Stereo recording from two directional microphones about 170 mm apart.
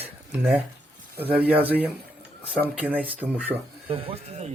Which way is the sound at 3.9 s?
35° right (ahead or behind).